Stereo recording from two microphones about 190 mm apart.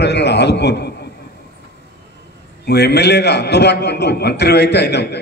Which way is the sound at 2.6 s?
60° left (ahead or behind).